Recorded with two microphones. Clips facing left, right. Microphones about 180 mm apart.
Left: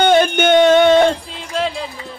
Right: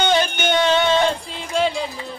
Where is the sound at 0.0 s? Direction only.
55° left (ahead or behind).